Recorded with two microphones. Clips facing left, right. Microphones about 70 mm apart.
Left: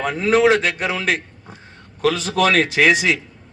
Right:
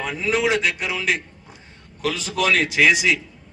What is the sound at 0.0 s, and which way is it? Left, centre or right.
A man's voice, left.